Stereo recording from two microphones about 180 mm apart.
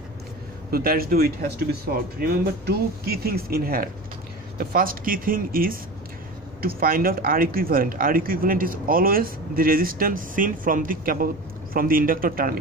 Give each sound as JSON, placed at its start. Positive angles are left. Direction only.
{"t": 0.7, "sound": "speech", "side_deg": -55}